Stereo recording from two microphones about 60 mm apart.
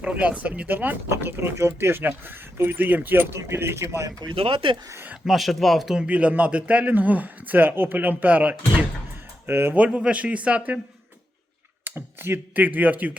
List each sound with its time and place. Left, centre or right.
0.0 s speech: right
3.3 s speech: right
5.2 s speech: centre
6.1 s a man's voice: right
9.5 s speech: right
9.7 s a man's voice: right
11.9 s a sound: right
12.5 s a man's voice: right